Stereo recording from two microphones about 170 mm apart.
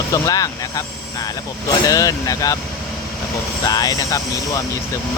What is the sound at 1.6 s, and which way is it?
Speech, 20° left (ahead or behind).